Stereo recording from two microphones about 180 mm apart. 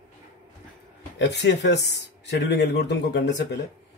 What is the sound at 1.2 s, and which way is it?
Speech, 70° left (ahead or behind).